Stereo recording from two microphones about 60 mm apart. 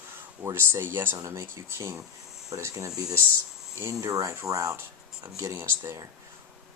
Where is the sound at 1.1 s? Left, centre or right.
Right.